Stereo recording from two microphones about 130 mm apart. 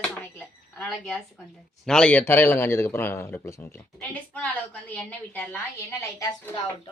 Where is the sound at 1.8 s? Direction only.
5° left (ahead or behind); by 6.5 s 25° left (ahead or behind).